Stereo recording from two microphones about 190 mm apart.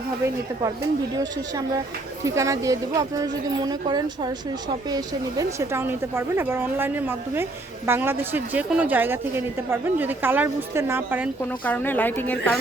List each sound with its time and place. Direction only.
1.1 s a woman's voice: 20° right (ahead or behind)
11.6 s speech: 10° left (ahead or behind)